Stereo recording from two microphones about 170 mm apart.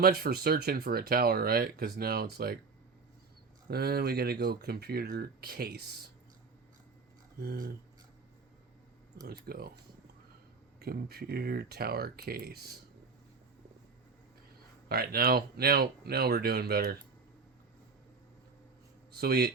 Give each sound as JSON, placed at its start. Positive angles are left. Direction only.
{"t": 0.0, "sound": "speech", "side_deg": -65}
{"t": 3.7, "sound": "speech", "side_deg": -65}
{"t": 7.3, "sound": "speech", "side_deg": -65}
{"t": 9.2, "sound": "speech", "side_deg": -65}
{"t": 10.8, "sound": "speech", "side_deg": -65}
{"t": 14.8, "sound": "speech", "side_deg": -65}
{"t": 19.1, "sound": "speech", "side_deg": -65}